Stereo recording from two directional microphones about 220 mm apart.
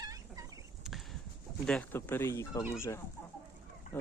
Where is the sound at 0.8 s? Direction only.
Centre (ahead or behind).